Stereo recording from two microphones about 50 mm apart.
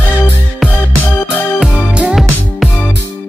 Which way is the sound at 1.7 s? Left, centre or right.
Centre.